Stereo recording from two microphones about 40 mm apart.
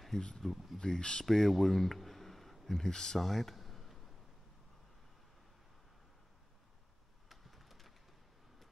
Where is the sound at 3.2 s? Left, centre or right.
Centre.